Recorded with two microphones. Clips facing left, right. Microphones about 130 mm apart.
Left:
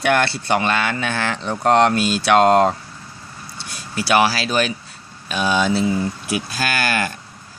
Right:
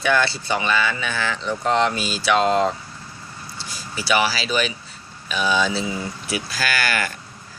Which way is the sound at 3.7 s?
55° left (ahead or behind).